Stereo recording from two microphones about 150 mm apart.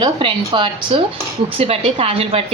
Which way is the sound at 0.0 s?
35° right (ahead or behind).